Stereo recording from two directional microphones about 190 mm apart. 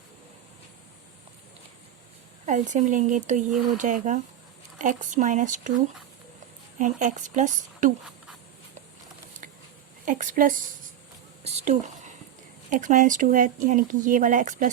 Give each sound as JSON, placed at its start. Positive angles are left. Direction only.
{"t": 2.5, "sound": "a woman's voice", "side_deg": -40}
{"t": 6.7, "sound": "a woman's voice", "side_deg": -40}
{"t": 10.1, "sound": "speech", "side_deg": -45}
{"t": 11.4, "sound": "whispering", "side_deg": -35}
{"t": 12.7, "sound": "speech", "side_deg": -45}